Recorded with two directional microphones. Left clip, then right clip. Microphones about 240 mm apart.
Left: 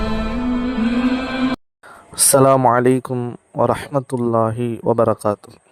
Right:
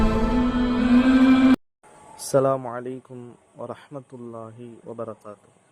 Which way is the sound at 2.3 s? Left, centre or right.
Left.